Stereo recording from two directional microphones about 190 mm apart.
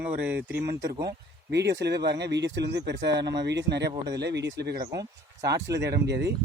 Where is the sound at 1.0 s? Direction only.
65° right (ahead or behind).